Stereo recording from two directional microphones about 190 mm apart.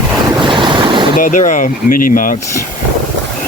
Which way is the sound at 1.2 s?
45° left (ahead or behind).